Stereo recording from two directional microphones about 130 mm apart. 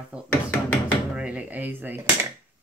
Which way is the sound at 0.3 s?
15° left (ahead or behind).